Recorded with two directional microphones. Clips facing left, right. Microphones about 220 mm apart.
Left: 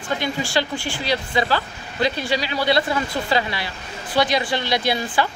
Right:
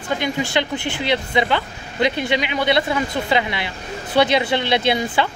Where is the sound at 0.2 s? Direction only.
20° right (ahead or behind).